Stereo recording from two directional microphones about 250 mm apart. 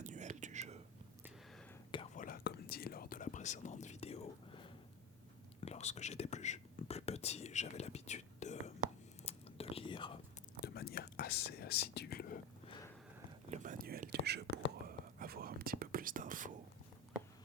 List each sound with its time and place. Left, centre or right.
0.0 s whispering: right
2.1 s whispering: left; by 10.1 s centre
10.8 s whispering: left
13.5 s whispering: right